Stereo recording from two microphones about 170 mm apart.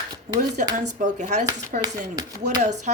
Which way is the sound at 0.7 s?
45° right (ahead or behind).